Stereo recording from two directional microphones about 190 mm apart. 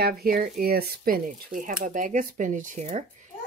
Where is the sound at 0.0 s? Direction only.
50° right (ahead or behind).